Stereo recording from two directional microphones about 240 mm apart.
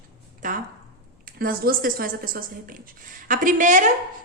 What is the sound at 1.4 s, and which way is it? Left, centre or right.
A woman's voice, right.